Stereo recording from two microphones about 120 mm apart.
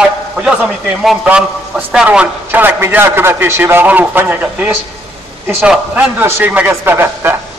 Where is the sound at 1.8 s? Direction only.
15° right (ahead or behind).